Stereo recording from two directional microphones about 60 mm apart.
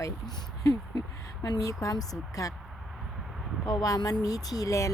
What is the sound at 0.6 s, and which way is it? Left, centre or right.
A woman's voice, left.